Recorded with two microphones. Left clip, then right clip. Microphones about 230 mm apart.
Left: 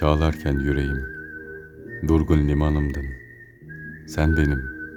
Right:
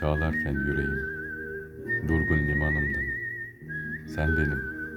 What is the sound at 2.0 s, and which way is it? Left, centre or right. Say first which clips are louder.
Speech: left 8 dB; left.